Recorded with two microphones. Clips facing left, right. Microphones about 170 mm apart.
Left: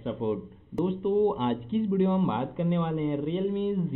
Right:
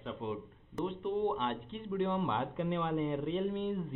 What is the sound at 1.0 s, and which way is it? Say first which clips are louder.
Speech: left 9 dB; 15° left (ahead or behind).